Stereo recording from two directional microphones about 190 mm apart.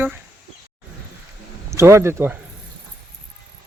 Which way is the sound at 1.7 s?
15° right (ahead or behind).